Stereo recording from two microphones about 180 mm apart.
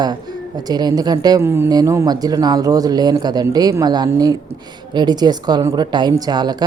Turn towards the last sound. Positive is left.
turn(degrees=-20)  # may be behind; listen again after turning